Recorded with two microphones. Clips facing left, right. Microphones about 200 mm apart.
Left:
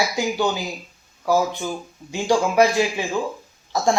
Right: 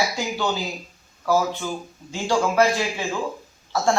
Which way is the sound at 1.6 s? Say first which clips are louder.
Left 1 dB; 15° left (ahead or behind).